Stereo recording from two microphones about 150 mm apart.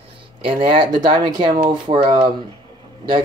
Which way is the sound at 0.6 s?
35° right (ahead or behind).